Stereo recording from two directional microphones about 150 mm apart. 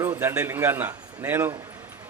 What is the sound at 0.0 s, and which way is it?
A man's voice, 15° right (ahead or behind).